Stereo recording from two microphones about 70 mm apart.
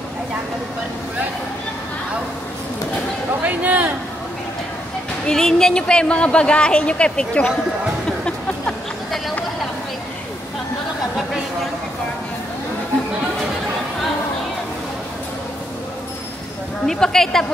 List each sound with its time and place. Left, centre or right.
3.4 s a man's voice: right
5.2 s a woman's voice: centre
16.8 s a woman's voice: centre